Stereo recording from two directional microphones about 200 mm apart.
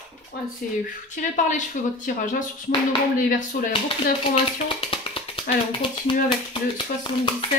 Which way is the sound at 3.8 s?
30° left (ahead or behind).